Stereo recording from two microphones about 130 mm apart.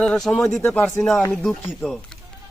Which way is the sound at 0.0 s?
5° left (ahead or behind).